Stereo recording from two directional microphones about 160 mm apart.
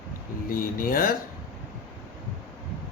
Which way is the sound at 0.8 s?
60° left (ahead or behind).